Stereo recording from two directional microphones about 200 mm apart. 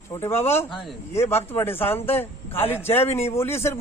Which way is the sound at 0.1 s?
10° left (ahead or behind).